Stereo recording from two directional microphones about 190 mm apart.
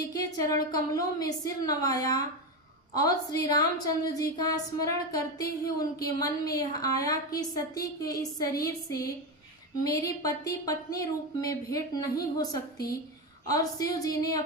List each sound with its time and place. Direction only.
0.1 s a woman's voice: 20° left (ahead or behind)